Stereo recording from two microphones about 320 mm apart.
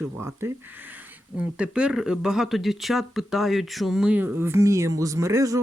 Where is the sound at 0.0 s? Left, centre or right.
Centre.